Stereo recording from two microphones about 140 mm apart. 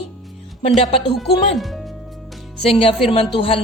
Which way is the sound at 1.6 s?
Centre (ahead or behind).